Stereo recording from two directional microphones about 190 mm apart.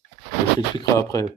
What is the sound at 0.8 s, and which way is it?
Speech, 15° left (ahead or behind).